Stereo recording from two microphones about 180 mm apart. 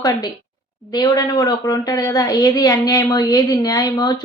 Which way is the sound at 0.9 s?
20° left (ahead or behind).